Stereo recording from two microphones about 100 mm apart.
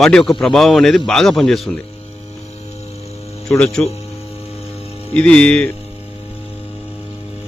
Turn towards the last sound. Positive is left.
turn(degrees=10)  # may be behind; listen again after turning